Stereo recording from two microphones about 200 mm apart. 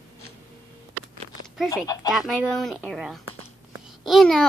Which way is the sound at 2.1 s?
Centre (ahead or behind).